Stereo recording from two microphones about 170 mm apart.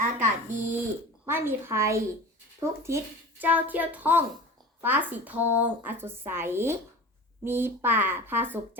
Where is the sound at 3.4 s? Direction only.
10° right (ahead or behind).